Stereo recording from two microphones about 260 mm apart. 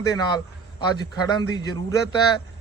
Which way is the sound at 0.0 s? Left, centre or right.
Centre.